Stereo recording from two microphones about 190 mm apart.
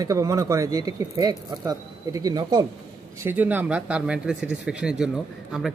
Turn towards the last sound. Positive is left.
turn(degrees=0)  # may be behind; listen again after turning